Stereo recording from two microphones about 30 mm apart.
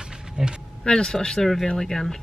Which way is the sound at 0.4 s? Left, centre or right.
Centre.